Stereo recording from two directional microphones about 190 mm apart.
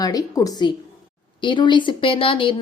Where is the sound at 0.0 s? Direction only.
20° left (ahead or behind).